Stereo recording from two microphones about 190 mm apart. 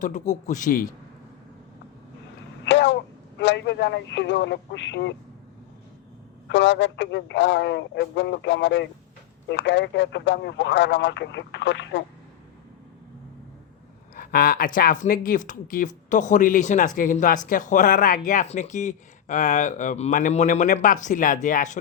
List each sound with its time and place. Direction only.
0.0 s speech: 40° left (ahead or behind)
2.6 s a sound: 70° left (ahead or behind)
6.5 s speech: 70° left (ahead or behind)
14.2 s speech: 50° left (ahead or behind)